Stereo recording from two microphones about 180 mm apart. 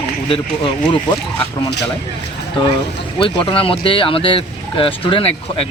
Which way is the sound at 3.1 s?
30° left (ahead or behind).